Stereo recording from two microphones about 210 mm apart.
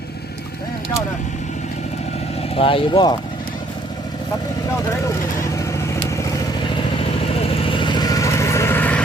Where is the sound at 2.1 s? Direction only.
30° left (ahead or behind).